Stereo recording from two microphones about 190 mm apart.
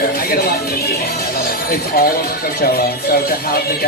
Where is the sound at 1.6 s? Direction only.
50° left (ahead or behind).